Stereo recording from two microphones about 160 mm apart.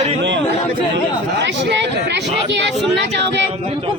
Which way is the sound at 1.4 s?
90° right.